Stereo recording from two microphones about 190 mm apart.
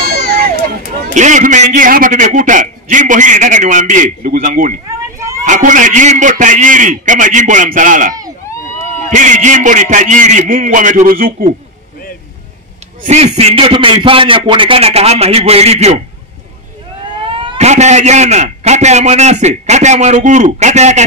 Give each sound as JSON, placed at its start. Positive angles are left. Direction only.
{"t": 1.1, "sound": "a man's voice", "side_deg": -40}
{"t": 13.0, "sound": "a man's voice", "side_deg": -35}
{"t": 17.2, "sound": "a man's voice", "side_deg": -25}